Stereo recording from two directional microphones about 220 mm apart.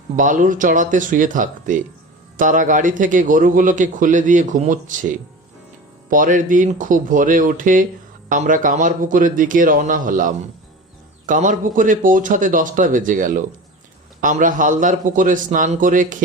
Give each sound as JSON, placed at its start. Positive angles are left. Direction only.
{"t": 0.2, "sound": "a man's voice", "side_deg": -35}